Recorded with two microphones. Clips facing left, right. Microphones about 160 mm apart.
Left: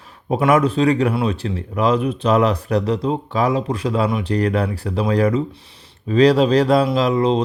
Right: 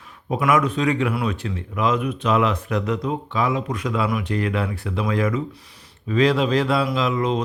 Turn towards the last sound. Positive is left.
turn(degrees=30)  # may be behind; listen again after turning